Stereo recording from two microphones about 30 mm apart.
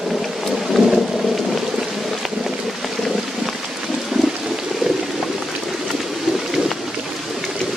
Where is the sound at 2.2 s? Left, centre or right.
Centre.